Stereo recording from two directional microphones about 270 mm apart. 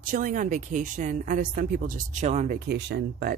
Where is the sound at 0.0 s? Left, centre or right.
Right.